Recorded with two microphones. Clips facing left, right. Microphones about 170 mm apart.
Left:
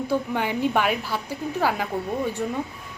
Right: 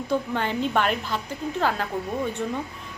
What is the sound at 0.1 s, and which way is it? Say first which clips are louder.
A woman's voice: right 1 dB; 10° left (ahead or behind).